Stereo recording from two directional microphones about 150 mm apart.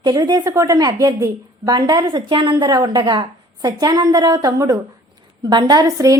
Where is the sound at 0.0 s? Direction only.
30° right (ahead or behind).